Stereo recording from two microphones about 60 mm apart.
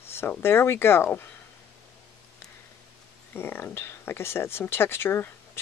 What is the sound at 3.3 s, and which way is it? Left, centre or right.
Speech, left.